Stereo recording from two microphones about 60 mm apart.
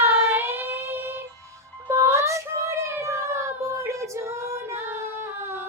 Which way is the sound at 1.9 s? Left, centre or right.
Right.